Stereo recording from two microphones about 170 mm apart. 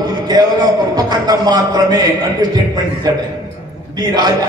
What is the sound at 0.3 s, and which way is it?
A man's voice, 25° right (ahead or behind).